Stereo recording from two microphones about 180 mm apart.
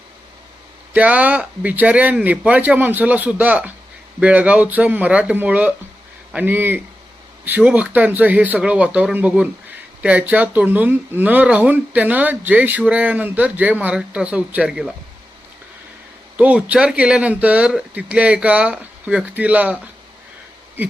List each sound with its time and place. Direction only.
0.9 s speech: 10° right (ahead or behind)
16.4 s speech: 5° right (ahead or behind)